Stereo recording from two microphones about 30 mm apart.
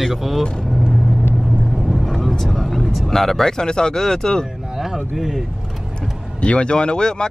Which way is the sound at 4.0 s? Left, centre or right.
Centre.